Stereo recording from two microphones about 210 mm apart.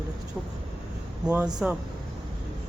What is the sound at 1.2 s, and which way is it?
Speech, 5° right (ahead or behind).